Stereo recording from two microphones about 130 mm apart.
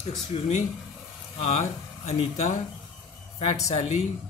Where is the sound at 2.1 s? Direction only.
60° left (ahead or behind).